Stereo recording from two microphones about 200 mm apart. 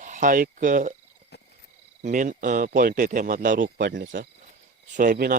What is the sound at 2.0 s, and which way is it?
Speech, 40° right (ahead or behind).